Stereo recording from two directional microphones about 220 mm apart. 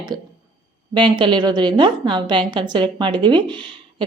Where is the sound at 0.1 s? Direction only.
20° right (ahead or behind).